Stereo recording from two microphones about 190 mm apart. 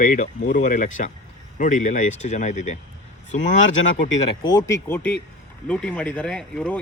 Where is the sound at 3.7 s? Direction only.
80° left.